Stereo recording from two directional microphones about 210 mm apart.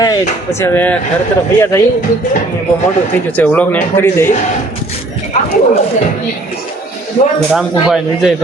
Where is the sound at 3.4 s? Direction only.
5° left (ahead or behind).